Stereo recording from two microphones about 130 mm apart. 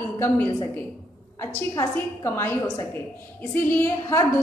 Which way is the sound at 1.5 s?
15° left (ahead or behind).